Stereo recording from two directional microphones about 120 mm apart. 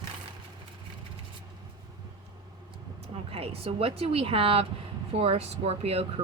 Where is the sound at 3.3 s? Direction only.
55° right (ahead or behind).